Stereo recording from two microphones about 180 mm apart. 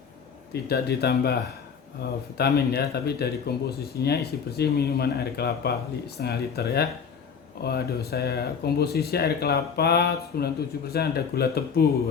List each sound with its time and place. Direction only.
0.5 s speech: 65° left (ahead or behind)
2.4 s speech: 65° left (ahead or behind)